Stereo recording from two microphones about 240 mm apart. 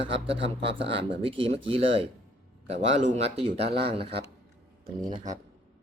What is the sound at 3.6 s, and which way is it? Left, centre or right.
Speech, right.